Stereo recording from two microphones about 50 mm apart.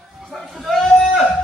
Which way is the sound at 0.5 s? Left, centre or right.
Centre.